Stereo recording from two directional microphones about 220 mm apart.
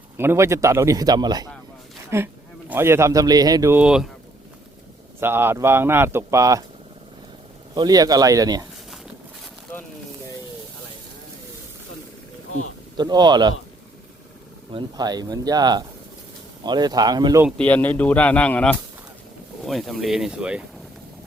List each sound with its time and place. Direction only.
0.2 s a man's voice: 10° right (ahead or behind)
5.2 s speech: 10° right (ahead or behind)
7.8 s speech: 15° right (ahead or behind)
13.0 s speech: 20° right (ahead or behind)
14.7 s speech: 20° right (ahead or behind)
17.6 s speech: 10° left (ahead or behind)